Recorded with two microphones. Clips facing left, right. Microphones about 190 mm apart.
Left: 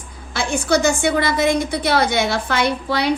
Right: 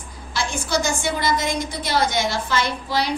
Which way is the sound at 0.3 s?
60° left (ahead or behind).